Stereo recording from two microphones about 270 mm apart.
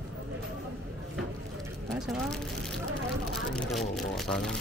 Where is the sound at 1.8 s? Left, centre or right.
Centre.